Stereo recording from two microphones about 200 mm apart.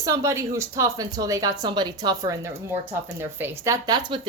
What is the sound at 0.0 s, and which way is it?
Speech, 15° right (ahead or behind).